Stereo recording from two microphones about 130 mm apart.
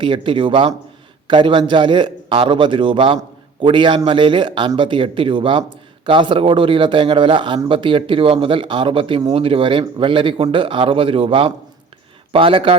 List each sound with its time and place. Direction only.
0.0 s a man's voice: 40° right (ahead or behind)